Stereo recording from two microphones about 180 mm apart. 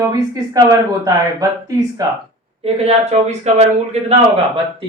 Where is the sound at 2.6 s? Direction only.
35° right (ahead or behind).